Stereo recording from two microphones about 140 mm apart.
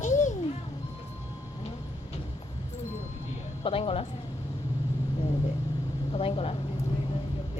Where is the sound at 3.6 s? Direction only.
40° left (ahead or behind).